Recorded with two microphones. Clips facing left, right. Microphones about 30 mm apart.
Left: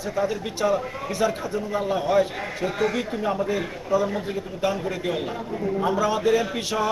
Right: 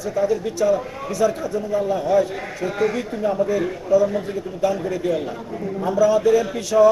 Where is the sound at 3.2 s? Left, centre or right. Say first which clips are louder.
Right 7 dB; left.